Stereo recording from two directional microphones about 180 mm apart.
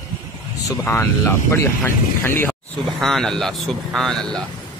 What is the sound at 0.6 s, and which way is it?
Speech, 15° left (ahead or behind).